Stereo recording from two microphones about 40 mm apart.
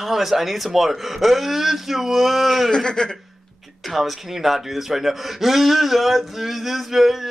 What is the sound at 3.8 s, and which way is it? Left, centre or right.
Speech, centre.